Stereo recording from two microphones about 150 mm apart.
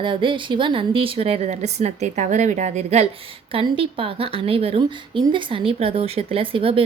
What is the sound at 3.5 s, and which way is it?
A woman's voice, 35° right (ahead or behind).